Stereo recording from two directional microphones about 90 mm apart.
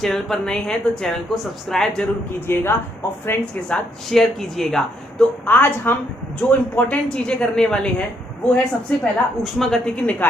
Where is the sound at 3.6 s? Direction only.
5° left (ahead or behind).